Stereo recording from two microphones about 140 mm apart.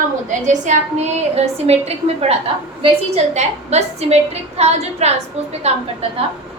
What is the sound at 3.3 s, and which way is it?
A woman's voice, 50° right (ahead or behind).